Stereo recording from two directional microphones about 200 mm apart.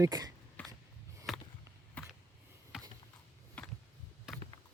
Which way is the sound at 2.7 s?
5° right (ahead or behind).